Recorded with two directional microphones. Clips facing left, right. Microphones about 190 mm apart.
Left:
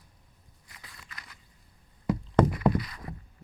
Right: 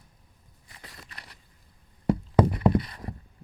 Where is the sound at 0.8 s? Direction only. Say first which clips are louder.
Right 4 dB; 35° right (ahead or behind).